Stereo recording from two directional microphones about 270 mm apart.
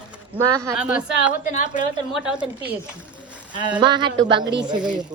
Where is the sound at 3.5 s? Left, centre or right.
Centre.